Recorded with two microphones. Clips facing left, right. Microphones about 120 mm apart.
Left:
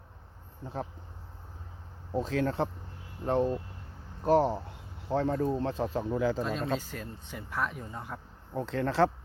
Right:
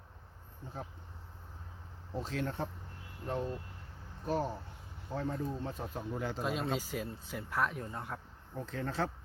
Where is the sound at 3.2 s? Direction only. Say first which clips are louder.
Left 9 dB; 70° left (ahead or behind); by 6.1 s 90° left.